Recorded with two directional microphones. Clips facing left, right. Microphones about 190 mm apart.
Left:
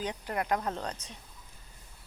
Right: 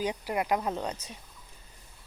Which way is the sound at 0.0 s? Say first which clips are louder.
Right 3 dB; 10° right (ahead or behind).